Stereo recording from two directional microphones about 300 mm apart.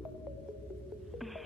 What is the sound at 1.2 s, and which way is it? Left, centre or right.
Music, centre.